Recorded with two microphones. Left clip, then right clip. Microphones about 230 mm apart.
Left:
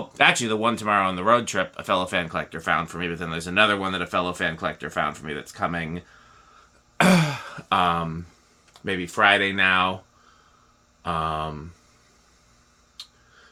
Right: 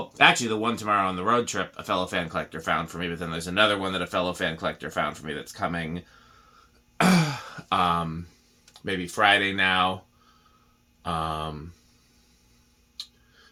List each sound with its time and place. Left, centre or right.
0.1 s speech: left
6.9 s throat clearing: left
8.8 s speech: left
11.0 s speech: left